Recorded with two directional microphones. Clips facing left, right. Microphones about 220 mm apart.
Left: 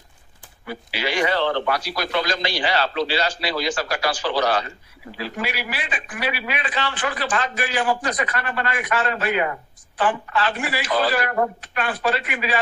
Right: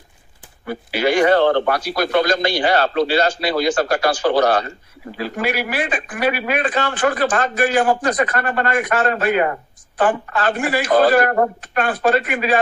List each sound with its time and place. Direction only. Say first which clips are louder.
0.7 s speech: right 8 dB; 50° right (ahead or behind)